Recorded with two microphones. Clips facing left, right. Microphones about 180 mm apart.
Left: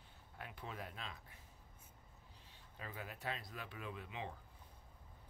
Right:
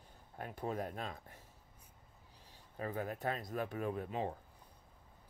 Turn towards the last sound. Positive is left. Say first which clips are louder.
# right 9 dB
turn(degrees=-45)  # may be behind; listen again after turning